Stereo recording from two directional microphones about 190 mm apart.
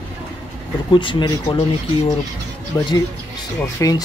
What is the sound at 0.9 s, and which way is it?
Speech, 25° left (ahead or behind).